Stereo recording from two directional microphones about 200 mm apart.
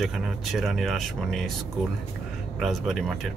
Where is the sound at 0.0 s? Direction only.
Centre (ahead or behind).